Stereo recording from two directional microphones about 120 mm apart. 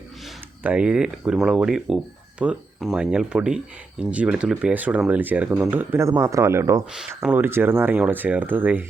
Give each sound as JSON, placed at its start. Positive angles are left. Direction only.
{"t": 0.6, "sound": "speech", "side_deg": -10}